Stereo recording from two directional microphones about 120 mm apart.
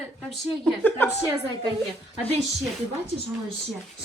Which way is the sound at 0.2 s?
5° left (ahead or behind).